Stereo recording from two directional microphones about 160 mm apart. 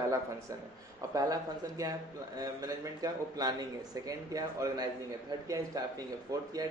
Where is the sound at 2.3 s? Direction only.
25° right (ahead or behind).